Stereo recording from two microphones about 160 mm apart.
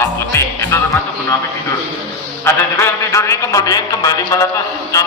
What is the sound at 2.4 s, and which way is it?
A man's voice, 15° left (ahead or behind).